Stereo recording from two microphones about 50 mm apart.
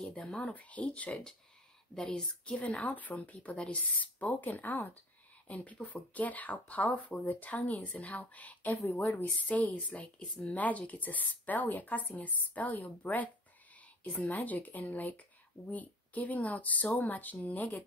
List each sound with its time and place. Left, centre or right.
0.0 s speech: centre
0.5 s speech: left
2.0 s speech: centre
2.4 s speech: left